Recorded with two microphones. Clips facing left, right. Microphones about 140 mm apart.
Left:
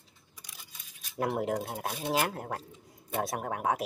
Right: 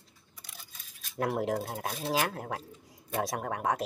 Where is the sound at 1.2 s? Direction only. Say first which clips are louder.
Even; centre (ahead or behind).